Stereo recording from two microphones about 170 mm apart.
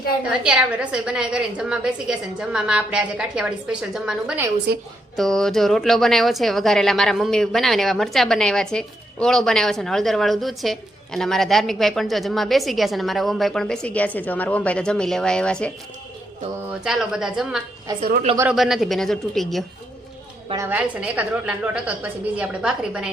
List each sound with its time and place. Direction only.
0.3 s speech: 5° right (ahead or behind)
4.7 s a woman's voice: 70° right (ahead or behind)
5.1 s speech: centre (ahead or behind)
16.8 s speech: 5° right (ahead or behind)
18.0 s speech: 55° right (ahead or behind)
18.5 s speech: centre (ahead or behind)
20.6 s a woman's voice: 10° right (ahead or behind)